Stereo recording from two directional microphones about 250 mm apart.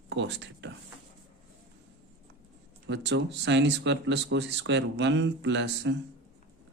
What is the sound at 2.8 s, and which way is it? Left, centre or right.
Speech, right.